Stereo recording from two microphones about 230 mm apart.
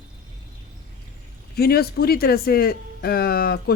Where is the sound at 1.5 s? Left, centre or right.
Left.